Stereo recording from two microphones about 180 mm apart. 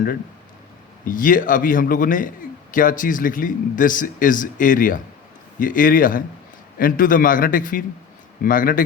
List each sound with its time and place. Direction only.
1.0 s speech: 50° left (ahead or behind)